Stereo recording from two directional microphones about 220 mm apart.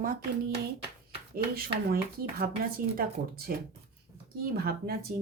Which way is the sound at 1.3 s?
40° right (ahead or behind).